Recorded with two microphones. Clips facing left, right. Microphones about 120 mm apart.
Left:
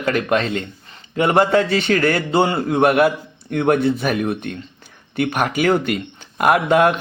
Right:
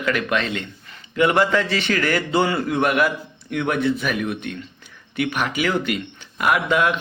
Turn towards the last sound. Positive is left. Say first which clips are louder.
# left 5 dB
turn(degrees=45)  # may be behind; listen again after turning